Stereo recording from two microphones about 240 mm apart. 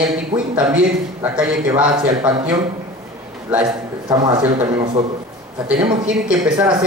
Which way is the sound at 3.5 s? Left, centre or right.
Centre.